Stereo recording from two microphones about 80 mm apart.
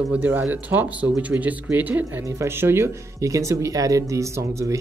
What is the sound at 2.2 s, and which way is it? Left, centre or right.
Speech, right.